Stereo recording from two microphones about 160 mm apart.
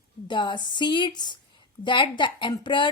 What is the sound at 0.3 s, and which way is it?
A woman's voice, 30° left (ahead or behind).